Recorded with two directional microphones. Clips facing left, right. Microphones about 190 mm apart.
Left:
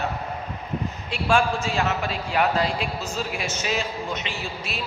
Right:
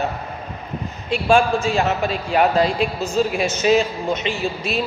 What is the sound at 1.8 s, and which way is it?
A man's voice, 20° right (ahead or behind).